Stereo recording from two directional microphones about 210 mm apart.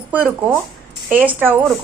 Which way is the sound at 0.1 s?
5° right (ahead or behind).